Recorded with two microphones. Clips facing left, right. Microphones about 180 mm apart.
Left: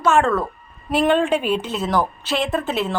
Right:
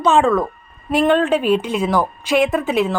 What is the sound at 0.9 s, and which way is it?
Speech, 5° left (ahead or behind).